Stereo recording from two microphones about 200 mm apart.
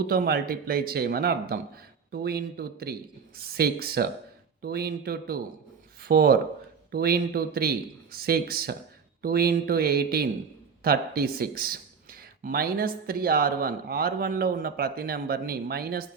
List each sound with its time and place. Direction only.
0.1 s speech: 50° right (ahead or behind)